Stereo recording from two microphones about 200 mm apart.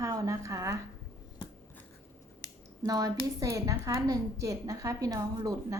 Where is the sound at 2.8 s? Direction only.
20° right (ahead or behind).